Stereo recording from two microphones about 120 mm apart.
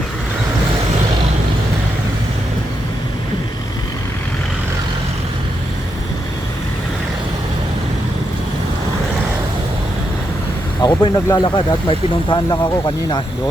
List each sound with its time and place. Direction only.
10.8 s speech: 35° left (ahead or behind)